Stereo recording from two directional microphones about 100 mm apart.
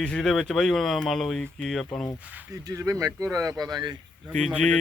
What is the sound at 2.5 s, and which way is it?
Speech, 30° right (ahead or behind).